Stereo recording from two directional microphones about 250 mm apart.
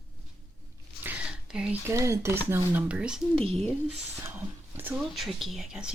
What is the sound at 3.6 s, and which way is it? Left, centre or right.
Speech, centre.